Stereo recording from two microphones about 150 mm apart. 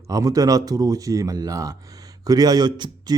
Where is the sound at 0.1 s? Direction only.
25° right (ahead or behind).